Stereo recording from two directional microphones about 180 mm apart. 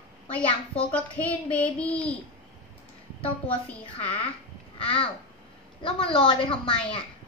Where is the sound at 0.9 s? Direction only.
10° left (ahead or behind).